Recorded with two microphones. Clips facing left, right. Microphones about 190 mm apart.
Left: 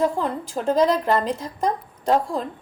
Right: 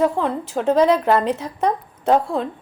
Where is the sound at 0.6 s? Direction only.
5° right (ahead or behind).